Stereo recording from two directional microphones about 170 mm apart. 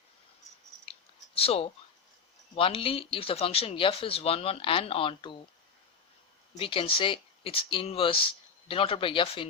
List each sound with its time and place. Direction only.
1.4 s speech: 35° left (ahead or behind)
6.6 s speech: 30° left (ahead or behind)